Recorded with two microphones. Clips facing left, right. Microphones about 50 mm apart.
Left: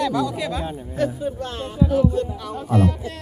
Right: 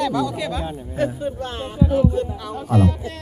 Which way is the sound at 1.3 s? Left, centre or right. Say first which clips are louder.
Right 1 dB; right.